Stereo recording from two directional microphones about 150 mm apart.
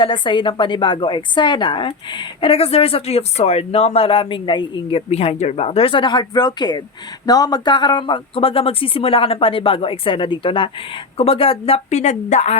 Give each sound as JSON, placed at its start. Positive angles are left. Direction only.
{"t": 0.0, "sound": "a woman's voice", "side_deg": 35}